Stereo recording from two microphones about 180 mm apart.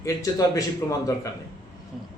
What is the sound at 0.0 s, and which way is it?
Speech, 20° left (ahead or behind).